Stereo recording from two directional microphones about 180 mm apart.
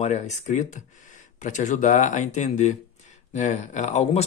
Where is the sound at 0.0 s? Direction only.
40° left (ahead or behind).